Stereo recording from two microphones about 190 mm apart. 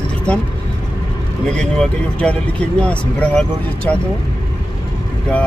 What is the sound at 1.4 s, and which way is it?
Speech, 5° left (ahead or behind).